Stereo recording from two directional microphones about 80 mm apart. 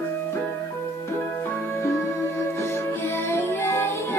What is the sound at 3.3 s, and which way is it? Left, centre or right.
Music, left.